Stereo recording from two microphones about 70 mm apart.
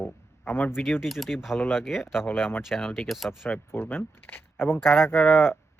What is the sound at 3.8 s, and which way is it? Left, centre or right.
Speech, left.